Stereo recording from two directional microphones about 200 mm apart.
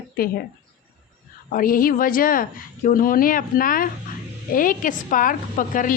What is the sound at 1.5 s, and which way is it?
A woman's voice, 45° left (ahead or behind).